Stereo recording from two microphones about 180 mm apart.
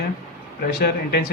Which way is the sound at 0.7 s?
60° left (ahead or behind).